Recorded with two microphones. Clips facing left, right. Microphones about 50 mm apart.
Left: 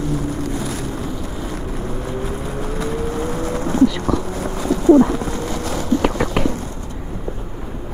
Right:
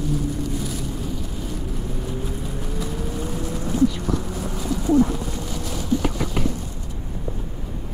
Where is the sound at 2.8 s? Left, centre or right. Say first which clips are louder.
Left 7 dB; left.